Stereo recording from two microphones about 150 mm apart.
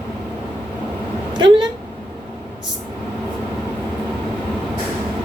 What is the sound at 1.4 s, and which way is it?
Speech, 30° right (ahead or behind).